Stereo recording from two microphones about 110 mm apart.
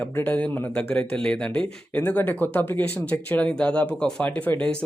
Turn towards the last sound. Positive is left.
turn(degrees=10)  # may be behind; listen again after turning